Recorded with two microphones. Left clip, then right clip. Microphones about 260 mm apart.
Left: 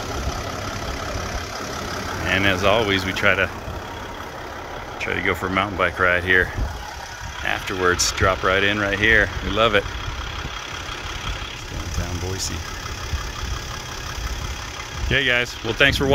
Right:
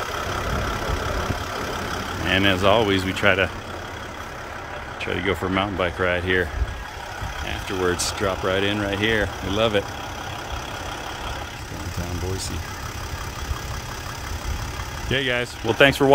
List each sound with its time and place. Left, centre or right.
2.2 s speech: centre
5.0 s speech: centre
7.4 s speech: centre
15.0 s speech: centre
15.8 s speech: centre